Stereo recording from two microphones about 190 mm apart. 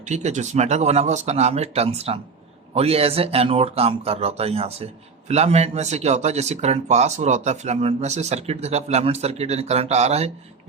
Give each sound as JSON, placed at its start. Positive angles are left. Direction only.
{"t": 0.1, "sound": "speech", "side_deg": -40}